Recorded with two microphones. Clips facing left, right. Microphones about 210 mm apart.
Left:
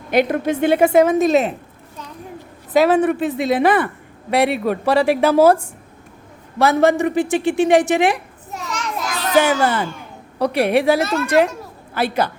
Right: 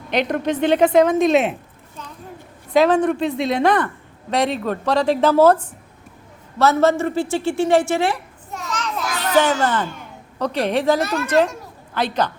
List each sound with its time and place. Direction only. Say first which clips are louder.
0.1 s a woman's voice: left 3 dB; 5° left (ahead or behind)
2.7 s a woman's voice: left 1 dB; 5° left (ahead or behind)
9.3 s a woman's voice: left 2 dB; 10° left (ahead or behind)